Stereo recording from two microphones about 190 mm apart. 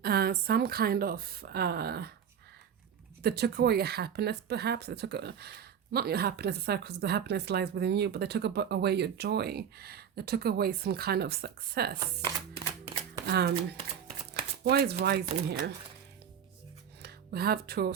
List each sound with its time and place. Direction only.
0.0 s speech: 55° right (ahead or behind)
3.2 s speech: 55° right (ahead or behind)
13.2 s speech: 60° right (ahead or behind)
14.6 s speech: 55° right (ahead or behind)
17.0 s speech: 55° right (ahead or behind)